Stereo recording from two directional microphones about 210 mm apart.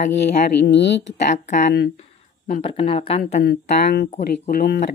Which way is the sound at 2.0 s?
35° left (ahead or behind).